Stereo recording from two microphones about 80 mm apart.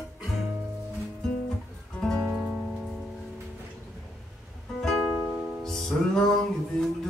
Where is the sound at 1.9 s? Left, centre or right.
Centre.